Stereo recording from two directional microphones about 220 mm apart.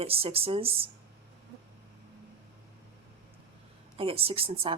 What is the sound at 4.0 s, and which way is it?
Speech, 25° right (ahead or behind).